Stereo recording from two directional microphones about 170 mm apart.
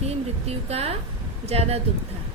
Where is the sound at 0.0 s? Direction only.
35° right (ahead or behind).